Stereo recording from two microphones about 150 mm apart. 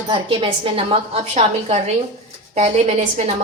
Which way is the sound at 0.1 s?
35° right (ahead or behind).